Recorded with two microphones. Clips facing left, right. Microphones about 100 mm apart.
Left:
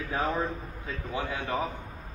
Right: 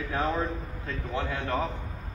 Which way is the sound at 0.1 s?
15° left (ahead or behind).